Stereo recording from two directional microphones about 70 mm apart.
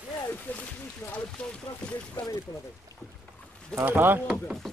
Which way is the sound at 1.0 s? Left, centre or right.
Left.